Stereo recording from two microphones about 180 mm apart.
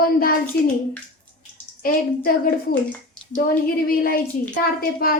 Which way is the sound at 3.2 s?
5° left (ahead or behind).